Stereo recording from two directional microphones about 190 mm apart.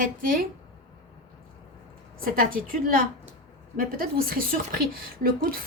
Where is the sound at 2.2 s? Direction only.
50° right (ahead or behind).